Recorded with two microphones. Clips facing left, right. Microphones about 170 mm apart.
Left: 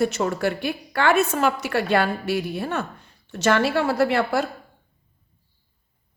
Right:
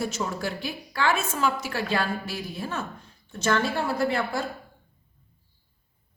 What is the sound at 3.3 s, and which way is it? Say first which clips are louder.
Speech: left 5 dB; 75° left (ahead or behind).